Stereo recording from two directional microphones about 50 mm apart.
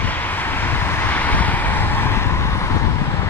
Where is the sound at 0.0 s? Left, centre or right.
Left.